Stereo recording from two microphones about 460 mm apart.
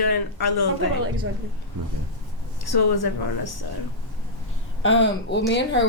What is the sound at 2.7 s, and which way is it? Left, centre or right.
Speech, left.